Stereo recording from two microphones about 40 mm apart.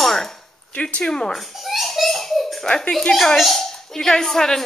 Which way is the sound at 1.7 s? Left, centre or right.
Centre.